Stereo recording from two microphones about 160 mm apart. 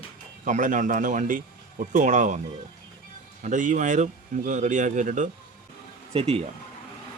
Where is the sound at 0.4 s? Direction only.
55° right (ahead or behind).